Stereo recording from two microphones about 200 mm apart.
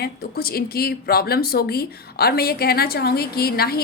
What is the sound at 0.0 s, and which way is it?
A woman's voice, 50° left (ahead or behind).